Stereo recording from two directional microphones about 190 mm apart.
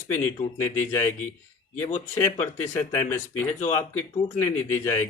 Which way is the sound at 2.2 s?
15° left (ahead or behind).